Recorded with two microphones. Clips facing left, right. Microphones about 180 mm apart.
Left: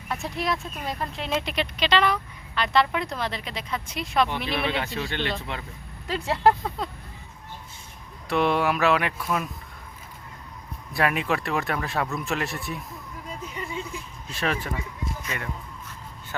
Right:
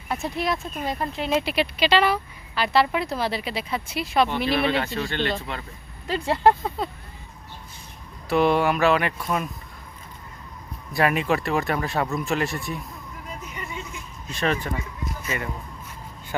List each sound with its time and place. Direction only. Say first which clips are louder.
0.1 s speech: right 2 dB; centre (ahead or behind)
8.3 s speech: right 3 dB; centre (ahead or behind)
10.9 s speech: right 3 dB; centre (ahead or behind)
13.4 s a sound: left 4 dB; 30° left (ahead or behind)
14.3 s speech: right 3 dB; 5° left (ahead or behind)